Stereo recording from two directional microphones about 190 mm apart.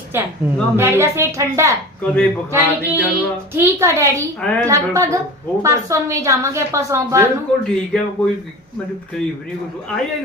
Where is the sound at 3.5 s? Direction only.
15° right (ahead or behind).